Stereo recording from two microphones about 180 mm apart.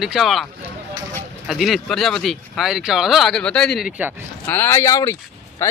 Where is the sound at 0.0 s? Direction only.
Centre (ahead or behind).